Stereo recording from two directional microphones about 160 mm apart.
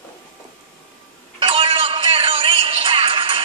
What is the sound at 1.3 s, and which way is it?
Music, 35° right (ahead or behind).